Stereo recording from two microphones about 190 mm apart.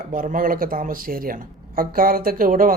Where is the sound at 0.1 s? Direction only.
45° right (ahead or behind).